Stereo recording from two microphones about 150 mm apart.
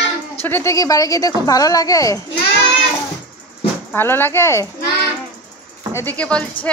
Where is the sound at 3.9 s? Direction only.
15° left (ahead or behind).